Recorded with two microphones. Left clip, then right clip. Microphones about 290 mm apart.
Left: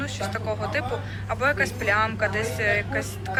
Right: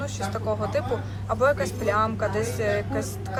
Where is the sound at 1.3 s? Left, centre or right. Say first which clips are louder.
Right 1 dB; centre.